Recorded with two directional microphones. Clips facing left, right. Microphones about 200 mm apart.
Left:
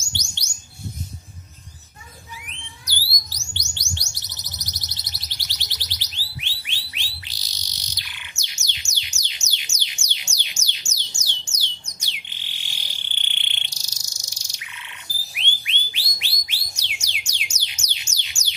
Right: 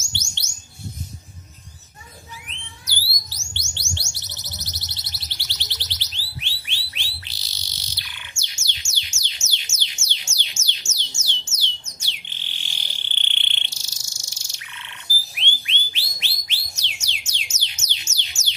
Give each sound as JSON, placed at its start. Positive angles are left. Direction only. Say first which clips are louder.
{"t": 0.0, "sound": "bird", "louder": "even", "side_deg": 15}
{"t": 2.8, "sound": "a sound", "louder": "left 1 dB", "side_deg": 15}
{"t": 8.6, "sound": "music", "louder": "even", "side_deg": 15}
{"t": 11.4, "sound": "a sound", "louder": "right 2 dB", "side_deg": 15}
{"t": 15.6, "sound": "bird", "louder": "right 1 dB", "side_deg": 15}
{"t": 16.2, "sound": "music", "louder": "right 1 dB", "side_deg": 10}